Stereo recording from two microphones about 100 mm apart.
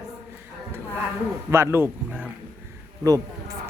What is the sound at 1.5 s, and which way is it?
Speech, 25° right (ahead or behind).